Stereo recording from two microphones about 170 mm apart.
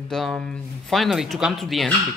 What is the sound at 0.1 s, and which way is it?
Speech, 5° left (ahead or behind).